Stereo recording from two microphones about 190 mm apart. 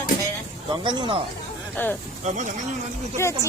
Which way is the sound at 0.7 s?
25° right (ahead or behind).